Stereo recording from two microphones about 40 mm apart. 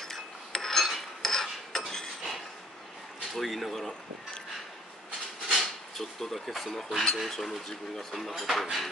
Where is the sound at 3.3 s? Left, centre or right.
Centre.